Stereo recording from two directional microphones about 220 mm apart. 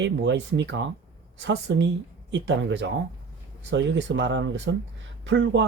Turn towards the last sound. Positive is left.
turn(degrees=-55)  # may be behind; listen again after turning